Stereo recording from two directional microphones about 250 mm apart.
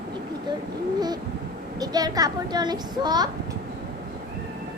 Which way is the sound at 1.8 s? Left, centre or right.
Centre.